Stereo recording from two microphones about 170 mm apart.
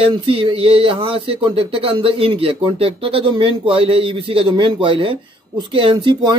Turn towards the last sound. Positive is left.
turn(degrees=-30)  # may be behind; listen again after turning